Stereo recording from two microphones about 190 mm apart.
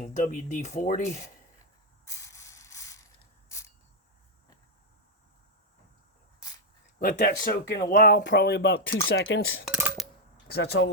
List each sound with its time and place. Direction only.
0.0 s speech: 40° left (ahead or behind)
2.0 s mechanisms: 15° left (ahead or behind)
7.0 s speech: 50° left (ahead or behind)
9.0 s speech: 75° left (ahead or behind)
9.6 s a sound: 5° right (ahead or behind)
10.5 s speech: 60° left (ahead or behind)